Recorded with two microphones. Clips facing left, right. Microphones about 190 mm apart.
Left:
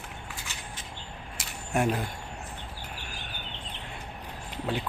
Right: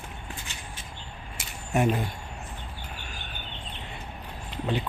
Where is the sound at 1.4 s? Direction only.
Centre (ahead or behind).